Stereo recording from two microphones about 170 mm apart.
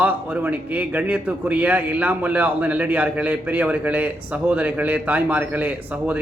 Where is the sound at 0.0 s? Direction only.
10° right (ahead or behind).